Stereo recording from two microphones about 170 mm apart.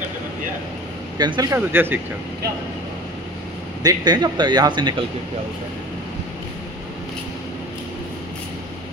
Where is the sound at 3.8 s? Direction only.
20° right (ahead or behind).